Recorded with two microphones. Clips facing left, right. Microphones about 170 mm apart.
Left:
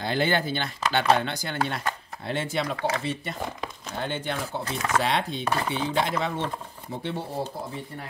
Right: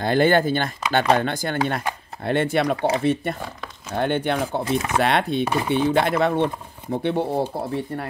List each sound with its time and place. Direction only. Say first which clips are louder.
0.0 s speech: right 8 dB; 50° right (ahead or behind)
4.6 s speech: right 2 dB; 20° right (ahead or behind)
5.0 s speech: right 6 dB; 60° right (ahead or behind)
5.4 s speech: right 5 dB; 15° right (ahead or behind)
5.8 s speech: right 7 dB; 60° right (ahead or behind)